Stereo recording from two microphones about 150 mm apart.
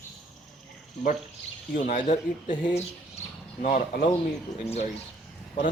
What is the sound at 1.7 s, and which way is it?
Speech, 60° left (ahead or behind).